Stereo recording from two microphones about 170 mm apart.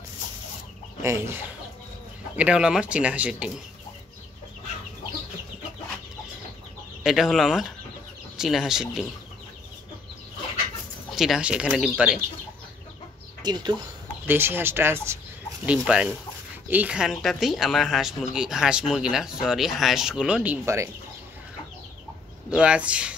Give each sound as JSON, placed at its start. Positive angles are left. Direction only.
{"t": 1.0, "sound": "speech", "side_deg": -15}
{"t": 7.0, "sound": "speech", "side_deg": 0}
{"t": 11.1, "sound": "speech", "side_deg": 0}
{"t": 13.4, "sound": "speech", "side_deg": -25}
{"t": 14.2, "sound": "speech", "side_deg": -10}
{"t": 20.6, "sound": "speech", "side_deg": -15}
{"t": 22.5, "sound": "speech", "side_deg": -5}